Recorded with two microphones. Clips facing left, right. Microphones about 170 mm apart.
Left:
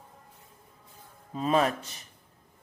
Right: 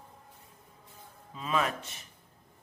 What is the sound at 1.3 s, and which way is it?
Speech, 40° left (ahead or behind).